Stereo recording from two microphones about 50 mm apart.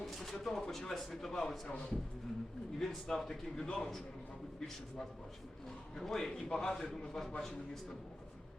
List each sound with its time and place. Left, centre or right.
0.0 s a sound: centre
0.3 s a man's voice: centre
1.6 s a man's voice: left
2.7 s a man's voice: centre
6.0 s a man's voice: centre